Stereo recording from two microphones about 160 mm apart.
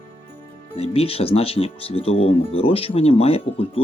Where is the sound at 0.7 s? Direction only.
35° left (ahead or behind).